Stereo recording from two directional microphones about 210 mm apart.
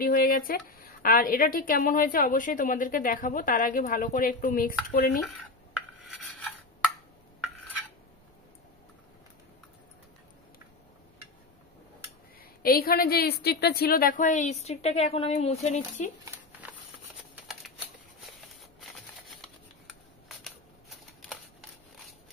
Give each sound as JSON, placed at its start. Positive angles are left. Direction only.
{"t": 0.0, "sound": "speech", "side_deg": 45}
{"t": 12.4, "sound": "speech", "side_deg": 45}
{"t": 19.9, "sound": "camera", "side_deg": 0}